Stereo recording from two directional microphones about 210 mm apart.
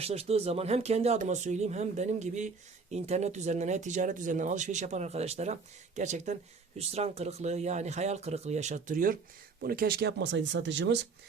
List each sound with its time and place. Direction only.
0.0 s speech: 30° right (ahead or behind); by 11.0 s 55° right (ahead or behind)